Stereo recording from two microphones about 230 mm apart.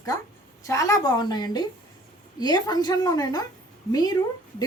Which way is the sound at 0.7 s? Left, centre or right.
Centre.